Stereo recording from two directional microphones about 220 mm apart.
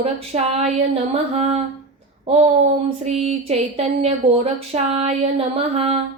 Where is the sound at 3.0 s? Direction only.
30° right (ahead or behind).